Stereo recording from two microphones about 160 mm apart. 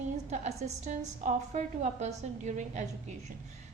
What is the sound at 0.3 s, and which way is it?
A woman's voice, 50° right (ahead or behind).